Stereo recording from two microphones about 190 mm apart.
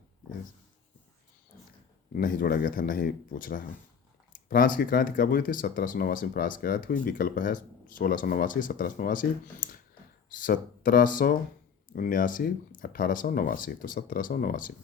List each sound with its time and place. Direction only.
2.1 s speech: 45° left (ahead or behind)